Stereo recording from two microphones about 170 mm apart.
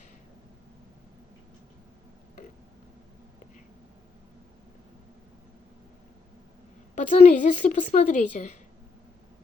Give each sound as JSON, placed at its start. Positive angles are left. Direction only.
{"t": 6.9, "sound": "a woman's voice", "side_deg": 50}